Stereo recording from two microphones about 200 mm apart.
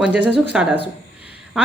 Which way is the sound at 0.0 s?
5° right (ahead or behind).